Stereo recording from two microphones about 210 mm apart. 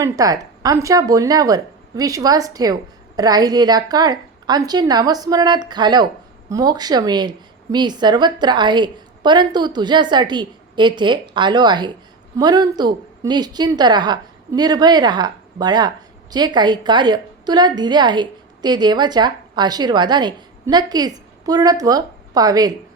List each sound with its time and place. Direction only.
0.0 s a woman's voice: 15° right (ahead or behind)